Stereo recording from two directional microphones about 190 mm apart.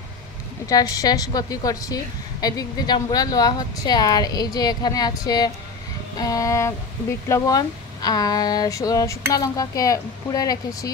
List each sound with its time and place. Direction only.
0.7 s speech: 20° left (ahead or behind)